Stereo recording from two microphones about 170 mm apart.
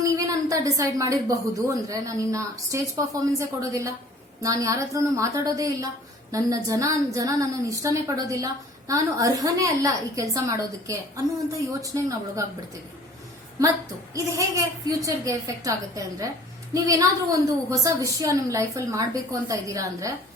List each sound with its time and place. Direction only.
0.0 s a woman's voice: 20° right (ahead or behind)
14.1 s a woman's voice: 20° right (ahead or behind)